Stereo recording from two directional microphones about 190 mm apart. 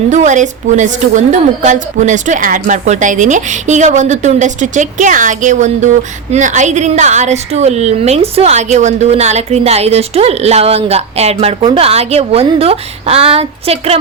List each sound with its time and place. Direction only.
0.1 s a woman's voice: 40° right (ahead or behind)